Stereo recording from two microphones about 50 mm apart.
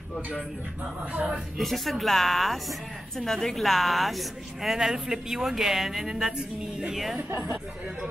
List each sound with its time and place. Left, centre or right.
1.1 s speech: right
1.6 s a woman's voice: centre
7.2 s speech: right